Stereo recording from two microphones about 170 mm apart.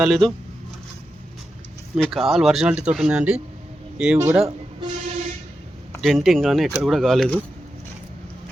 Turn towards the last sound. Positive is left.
turn(degrees=5)  # may be behind; listen again after turning